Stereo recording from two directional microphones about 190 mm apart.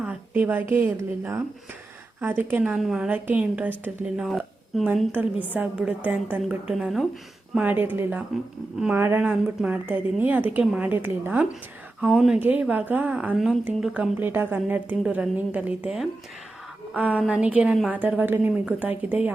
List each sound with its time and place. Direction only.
0.0 s a woman's voice: 10° right (ahead or behind)